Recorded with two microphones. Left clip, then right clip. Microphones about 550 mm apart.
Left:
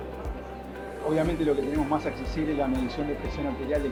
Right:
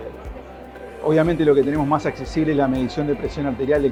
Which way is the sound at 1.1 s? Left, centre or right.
Right.